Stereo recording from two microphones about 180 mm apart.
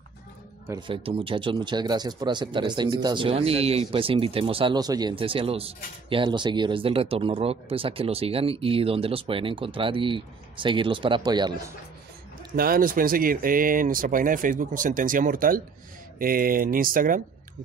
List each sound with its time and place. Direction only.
0.7 s speech: 30° right (ahead or behind)
12.5 s speech: 55° right (ahead or behind)